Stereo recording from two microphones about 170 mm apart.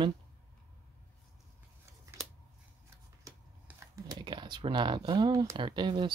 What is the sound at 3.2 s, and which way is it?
Speech, 15° right (ahead or behind).